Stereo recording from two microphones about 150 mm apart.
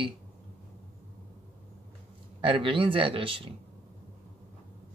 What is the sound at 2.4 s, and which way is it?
Speech, 35° right (ahead or behind).